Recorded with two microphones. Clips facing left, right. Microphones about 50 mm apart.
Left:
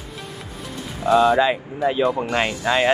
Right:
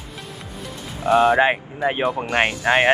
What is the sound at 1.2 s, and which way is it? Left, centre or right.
Speech, right.